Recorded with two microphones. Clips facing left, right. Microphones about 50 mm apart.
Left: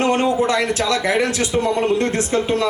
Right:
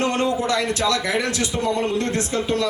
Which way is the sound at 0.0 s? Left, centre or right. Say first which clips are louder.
Left 4 dB; centre.